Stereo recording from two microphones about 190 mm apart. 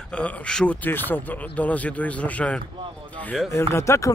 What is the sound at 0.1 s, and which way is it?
Speech, 5° left (ahead or behind).